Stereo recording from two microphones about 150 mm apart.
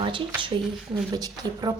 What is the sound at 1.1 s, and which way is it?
Speech, 25° right (ahead or behind).